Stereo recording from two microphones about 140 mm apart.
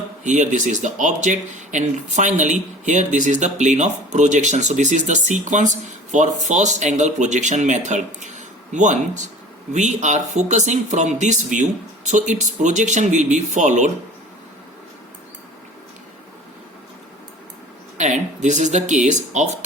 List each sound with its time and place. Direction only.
0.3 s speech: 60° right (ahead or behind)
17.9 s speech: 60° right (ahead or behind)